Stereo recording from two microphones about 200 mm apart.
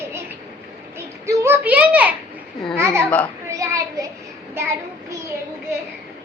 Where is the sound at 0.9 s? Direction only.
15° right (ahead or behind).